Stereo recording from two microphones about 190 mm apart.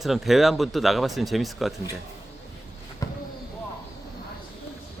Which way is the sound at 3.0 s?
20° left (ahead or behind).